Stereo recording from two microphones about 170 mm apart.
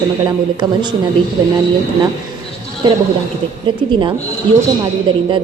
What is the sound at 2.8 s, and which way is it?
A woman's voice, 30° right (ahead or behind).